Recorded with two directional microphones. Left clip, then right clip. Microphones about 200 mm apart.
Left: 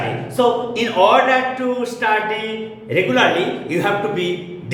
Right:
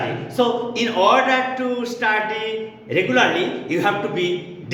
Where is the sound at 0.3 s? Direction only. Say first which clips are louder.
Left 3 dB; 20° right (ahead or behind).